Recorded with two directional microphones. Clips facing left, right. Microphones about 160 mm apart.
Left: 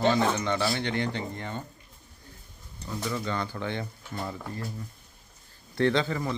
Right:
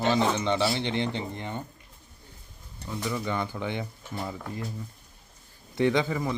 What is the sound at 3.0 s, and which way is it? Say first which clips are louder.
Speech: right 1 dB; 15° right (ahead or behind).